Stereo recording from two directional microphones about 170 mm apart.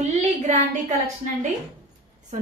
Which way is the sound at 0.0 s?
40° right (ahead or behind).